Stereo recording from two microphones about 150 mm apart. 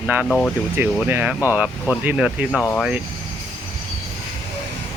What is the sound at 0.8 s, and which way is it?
Speech, 10° right (ahead or behind).